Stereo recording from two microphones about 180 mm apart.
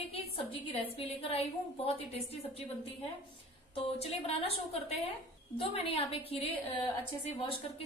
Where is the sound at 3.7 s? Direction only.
35° left (ahead or behind).